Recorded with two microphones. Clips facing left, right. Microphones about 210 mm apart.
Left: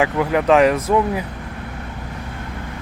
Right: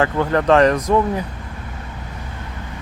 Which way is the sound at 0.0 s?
10° left (ahead or behind).